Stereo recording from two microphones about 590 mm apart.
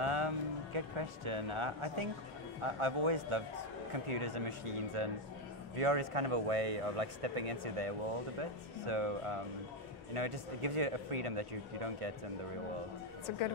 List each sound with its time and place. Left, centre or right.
0.0 s music: right
0.7 s speech: right